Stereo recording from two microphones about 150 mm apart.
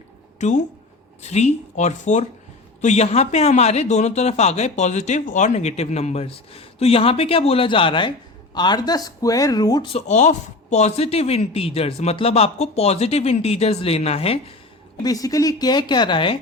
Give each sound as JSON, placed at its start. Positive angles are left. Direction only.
{"t": 0.3, "sound": "a woman's voice", "side_deg": 50}
{"t": 9.9, "sound": "speech", "side_deg": 50}
{"t": 15.0, "sound": "speech", "side_deg": 25}